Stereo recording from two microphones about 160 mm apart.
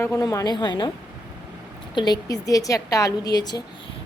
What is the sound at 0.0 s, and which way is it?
Speech, 20° left (ahead or behind).